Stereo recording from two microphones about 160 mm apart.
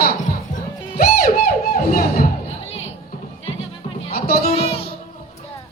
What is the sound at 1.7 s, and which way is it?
Music, 70° left (ahead or behind).